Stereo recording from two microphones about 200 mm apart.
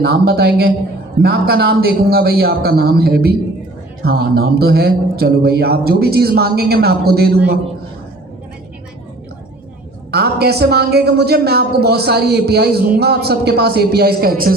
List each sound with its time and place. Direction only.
0.0 s a woman's voice: 50° right (ahead or behind)
10.1 s a woman's voice: 55° right (ahead or behind)